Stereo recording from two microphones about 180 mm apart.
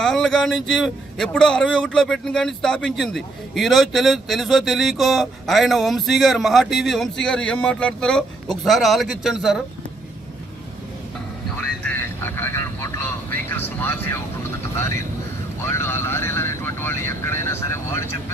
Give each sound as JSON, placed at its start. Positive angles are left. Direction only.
{"t": 0.0, "sound": "speech", "side_deg": 0}
{"t": 11.8, "sound": "vehicle", "side_deg": 10}